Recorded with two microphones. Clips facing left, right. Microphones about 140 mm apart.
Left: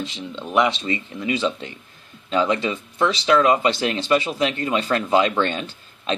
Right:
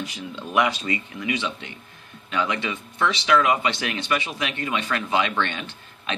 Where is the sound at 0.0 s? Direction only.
25° left (ahead or behind).